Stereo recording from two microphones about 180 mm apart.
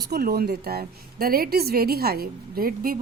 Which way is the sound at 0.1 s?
60° right (ahead or behind).